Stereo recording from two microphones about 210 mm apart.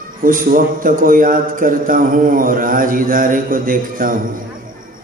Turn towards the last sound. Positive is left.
turn(degrees=-40)  # may be behind; listen again after turning